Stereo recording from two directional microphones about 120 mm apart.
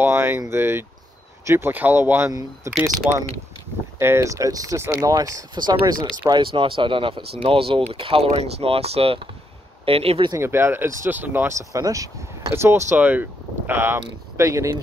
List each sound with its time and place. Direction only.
0.0 s speech: 20° right (ahead or behind); by 5.9 s 35° right (ahead or behind)
6.2 s speech: 45° right (ahead or behind)
10.3 s speech: 20° right (ahead or behind)